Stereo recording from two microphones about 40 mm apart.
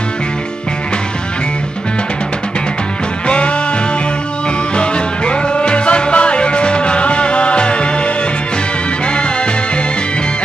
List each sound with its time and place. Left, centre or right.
3.3 s music: left
4.7 s music: left